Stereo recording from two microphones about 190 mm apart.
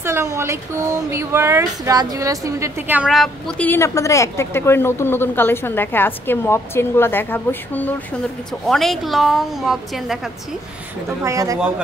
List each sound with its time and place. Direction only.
0.0 s a woman's voice: 15° right (ahead or behind)
11.2 s speech: 15° right (ahead or behind)